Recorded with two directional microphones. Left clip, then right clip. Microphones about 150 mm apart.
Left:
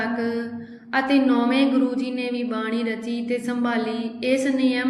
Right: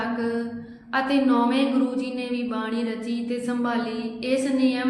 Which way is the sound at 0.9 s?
15° left (ahead or behind).